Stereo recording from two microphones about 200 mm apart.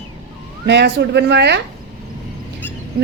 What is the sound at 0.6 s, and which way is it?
Speech, 55° right (ahead or behind).